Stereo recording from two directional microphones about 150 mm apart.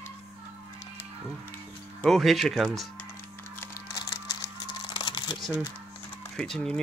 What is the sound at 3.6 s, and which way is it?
Music, 25° left (ahead or behind).